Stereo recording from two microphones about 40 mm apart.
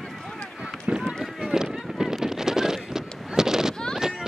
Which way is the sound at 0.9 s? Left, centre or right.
Right.